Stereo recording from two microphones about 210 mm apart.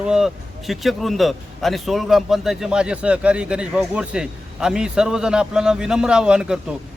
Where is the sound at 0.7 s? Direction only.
Centre (ahead or behind).